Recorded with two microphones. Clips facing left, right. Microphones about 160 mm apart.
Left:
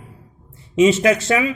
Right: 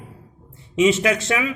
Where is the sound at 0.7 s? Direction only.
35° left (ahead or behind).